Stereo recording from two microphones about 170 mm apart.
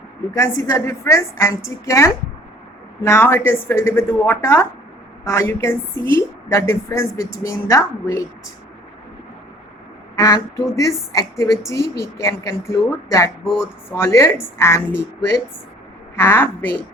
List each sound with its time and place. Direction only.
0.3 s a woman's voice: 15° left (ahead or behind)
10.2 s a woman's voice: 20° left (ahead or behind)
16.1 s a woman's voice: 15° left (ahead or behind)